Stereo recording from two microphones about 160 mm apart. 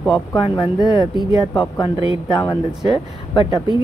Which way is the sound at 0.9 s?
30° left (ahead or behind).